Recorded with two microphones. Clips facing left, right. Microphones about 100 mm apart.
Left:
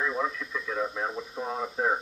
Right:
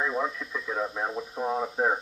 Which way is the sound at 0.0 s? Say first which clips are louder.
Right 1 dB; 10° right (ahead or behind).